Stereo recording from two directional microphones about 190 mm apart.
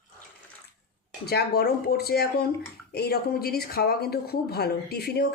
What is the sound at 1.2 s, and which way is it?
Speech, 55° left (ahead or behind).